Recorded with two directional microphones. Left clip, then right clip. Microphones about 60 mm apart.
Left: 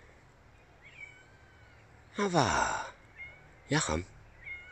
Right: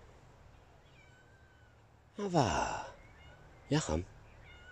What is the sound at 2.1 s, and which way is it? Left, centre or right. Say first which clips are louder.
A man's voice: left 4 dB; left.